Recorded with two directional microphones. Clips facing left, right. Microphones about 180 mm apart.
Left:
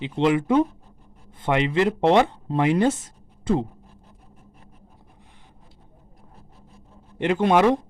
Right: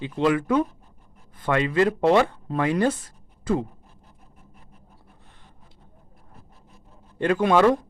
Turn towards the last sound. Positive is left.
turn(degrees=20)  # may be behind; listen again after turning